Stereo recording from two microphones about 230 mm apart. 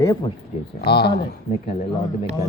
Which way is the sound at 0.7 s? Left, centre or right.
Left.